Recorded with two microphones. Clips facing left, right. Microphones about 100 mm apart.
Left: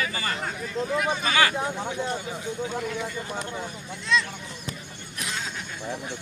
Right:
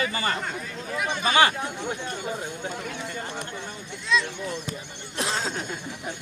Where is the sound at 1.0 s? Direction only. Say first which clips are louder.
Right 2 dB; centre (ahead or behind).